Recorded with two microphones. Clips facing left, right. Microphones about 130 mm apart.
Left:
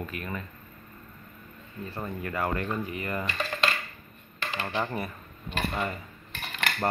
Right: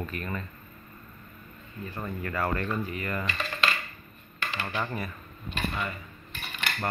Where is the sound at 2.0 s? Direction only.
20° left (ahead or behind).